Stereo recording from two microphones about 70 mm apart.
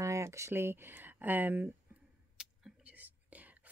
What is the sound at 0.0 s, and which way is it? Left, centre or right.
Speech, right.